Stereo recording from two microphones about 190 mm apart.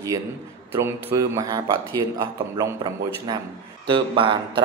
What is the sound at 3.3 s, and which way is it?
A man's voice, 20° right (ahead or behind).